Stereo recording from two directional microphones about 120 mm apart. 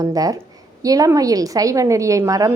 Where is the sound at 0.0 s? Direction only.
30° right (ahead or behind).